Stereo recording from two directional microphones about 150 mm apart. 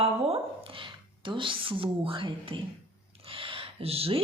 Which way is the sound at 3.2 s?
35° right (ahead or behind).